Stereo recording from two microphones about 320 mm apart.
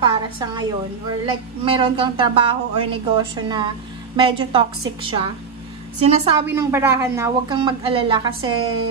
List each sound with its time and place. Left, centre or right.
0.0 s a woman's voice: centre